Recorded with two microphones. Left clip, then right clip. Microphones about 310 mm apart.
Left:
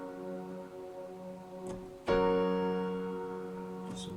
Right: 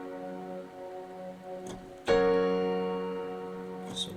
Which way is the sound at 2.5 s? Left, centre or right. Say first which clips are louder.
Right 4 dB; right.